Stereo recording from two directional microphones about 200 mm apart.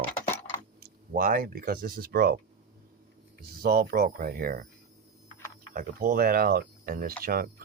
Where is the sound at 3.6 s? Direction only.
45° right (ahead or behind).